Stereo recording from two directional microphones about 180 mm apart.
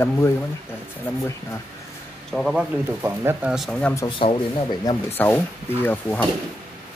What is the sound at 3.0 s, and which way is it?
Speech, 15° right (ahead or behind).